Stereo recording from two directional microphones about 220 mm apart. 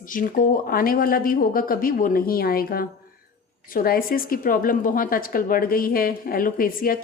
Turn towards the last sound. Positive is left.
turn(degrees=40)  # may be behind; listen again after turning